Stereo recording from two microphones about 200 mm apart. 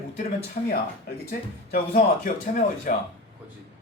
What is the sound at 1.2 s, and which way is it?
Speech, 45° left (ahead or behind).